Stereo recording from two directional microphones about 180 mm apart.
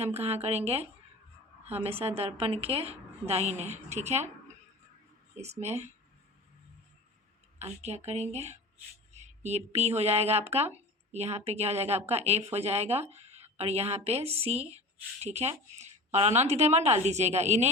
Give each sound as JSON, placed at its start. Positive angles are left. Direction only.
{"t": 0.0, "sound": "a woman's voice", "side_deg": -35}
{"t": 5.3, "sound": "a woman's voice", "side_deg": -40}
{"t": 7.6, "sound": "a woman's voice", "side_deg": -35}